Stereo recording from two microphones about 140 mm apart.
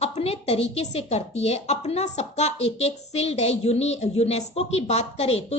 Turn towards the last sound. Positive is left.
turn(degrees=50)  # may be behind; listen again after turning